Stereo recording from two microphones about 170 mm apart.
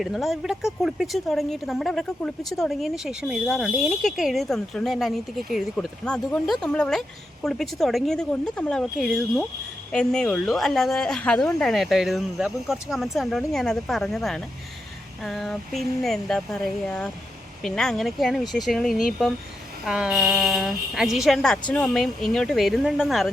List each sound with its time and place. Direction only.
0.0 s a woman's voice: centre (ahead or behind)